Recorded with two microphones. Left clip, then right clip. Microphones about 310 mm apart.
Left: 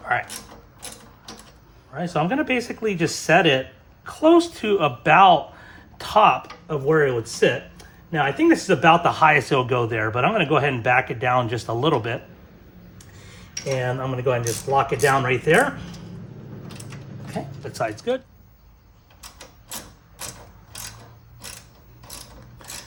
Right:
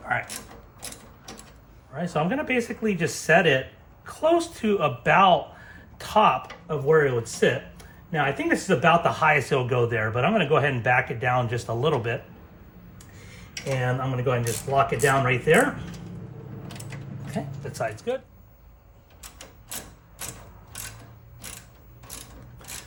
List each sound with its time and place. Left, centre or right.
1.9 s speech: left
13.8 s speech: left
17.6 s speech: left